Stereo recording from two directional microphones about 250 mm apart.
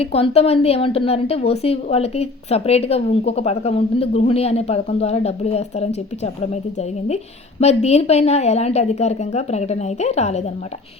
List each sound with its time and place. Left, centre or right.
0.0 s a woman's voice: left
7.6 s a woman's voice: left